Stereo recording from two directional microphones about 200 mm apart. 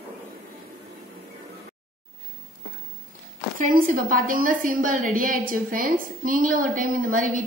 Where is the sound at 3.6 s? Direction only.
45° right (ahead or behind).